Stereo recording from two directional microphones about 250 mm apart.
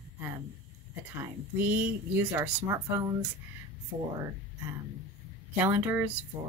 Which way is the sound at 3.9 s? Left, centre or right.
Right.